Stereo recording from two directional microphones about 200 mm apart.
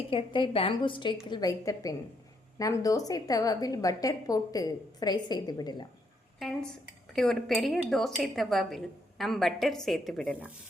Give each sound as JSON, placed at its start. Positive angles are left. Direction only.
{"t": 0.1, "sound": "a woman's voice", "side_deg": 25}
{"t": 6.4, "sound": "speech", "side_deg": 5}